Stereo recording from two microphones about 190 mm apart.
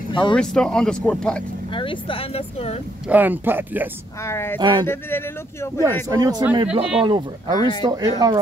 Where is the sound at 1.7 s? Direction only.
25° left (ahead or behind).